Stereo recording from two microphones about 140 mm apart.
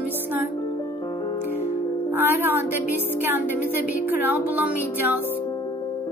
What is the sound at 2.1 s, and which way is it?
Music, 15° right (ahead or behind).